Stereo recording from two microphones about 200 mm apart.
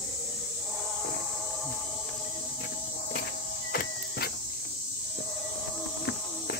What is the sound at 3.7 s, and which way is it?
Music, 50° left (ahead or behind).